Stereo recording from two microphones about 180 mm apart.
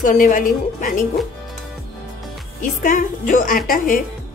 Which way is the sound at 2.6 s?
45° left (ahead or behind).